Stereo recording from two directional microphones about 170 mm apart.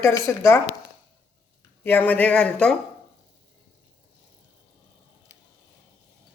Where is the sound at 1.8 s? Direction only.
10° left (ahead or behind).